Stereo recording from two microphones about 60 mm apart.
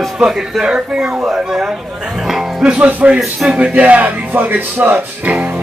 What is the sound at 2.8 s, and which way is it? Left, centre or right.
Speech, right.